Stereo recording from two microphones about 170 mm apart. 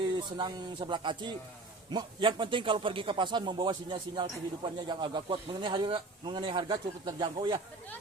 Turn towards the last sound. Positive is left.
turn(degrees=-30)  # may be behind; listen again after turning